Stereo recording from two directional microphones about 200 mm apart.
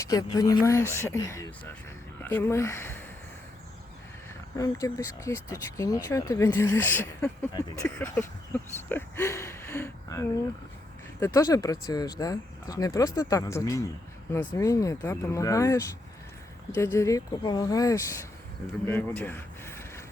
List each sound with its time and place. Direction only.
0.0 s speech: 15° left (ahead or behind)
4.5 s speech: 15° left (ahead or behind)
18.9 s a sound: 10° left (ahead or behind)